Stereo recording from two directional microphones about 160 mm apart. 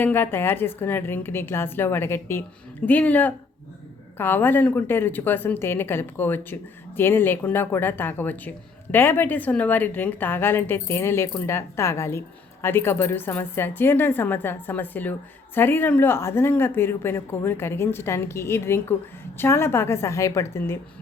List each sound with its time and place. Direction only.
0.0 s a woman's voice: 15° left (ahead or behind)